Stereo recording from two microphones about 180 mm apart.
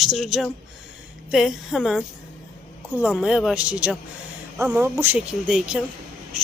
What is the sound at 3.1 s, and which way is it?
A woman's voice, centre (ahead or behind).